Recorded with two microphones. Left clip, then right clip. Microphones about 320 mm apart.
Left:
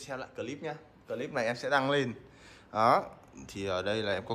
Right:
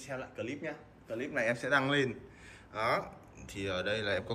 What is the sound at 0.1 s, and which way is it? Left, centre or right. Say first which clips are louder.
Speech: left 1 dB; centre.